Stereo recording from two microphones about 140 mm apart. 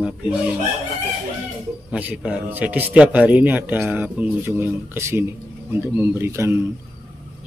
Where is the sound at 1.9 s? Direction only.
10° right (ahead or behind).